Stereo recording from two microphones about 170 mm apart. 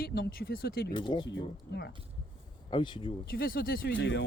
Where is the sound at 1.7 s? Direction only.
85° left.